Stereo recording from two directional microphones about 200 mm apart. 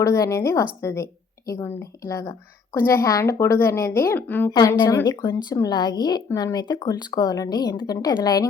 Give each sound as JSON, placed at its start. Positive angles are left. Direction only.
{"t": 0.0, "sound": "a woman's voice", "side_deg": 15}